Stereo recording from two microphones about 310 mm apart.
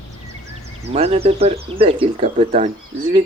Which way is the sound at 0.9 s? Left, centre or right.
Centre.